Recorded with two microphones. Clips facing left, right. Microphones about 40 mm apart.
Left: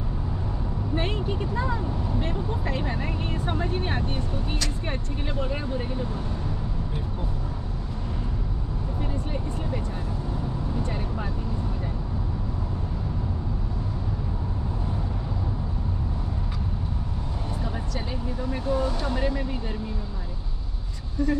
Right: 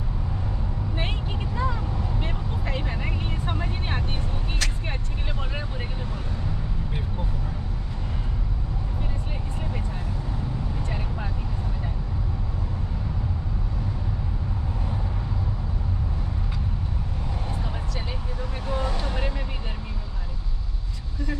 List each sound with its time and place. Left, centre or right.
2.7 s vehicle: centre
18.7 s vehicle: right
19.0 s vehicle: right